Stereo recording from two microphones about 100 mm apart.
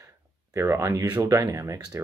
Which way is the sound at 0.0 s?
30° right (ahead or behind).